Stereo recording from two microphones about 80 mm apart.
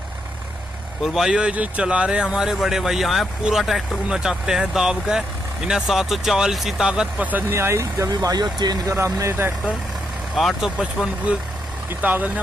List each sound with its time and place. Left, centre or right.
1.0 s speech: centre
7.2 s speech: right
8.1 s speech: right
8.8 s speech: right
10.3 s speech: centre
11.3 s speech: centre